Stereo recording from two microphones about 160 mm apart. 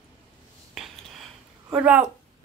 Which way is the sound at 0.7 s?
Centre (ahead or behind).